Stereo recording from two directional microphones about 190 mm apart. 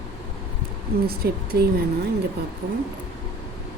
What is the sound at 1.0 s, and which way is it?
Speech, 55° right (ahead or behind).